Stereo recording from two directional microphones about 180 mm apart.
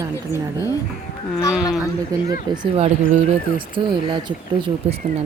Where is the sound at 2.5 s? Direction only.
25° right (ahead or behind).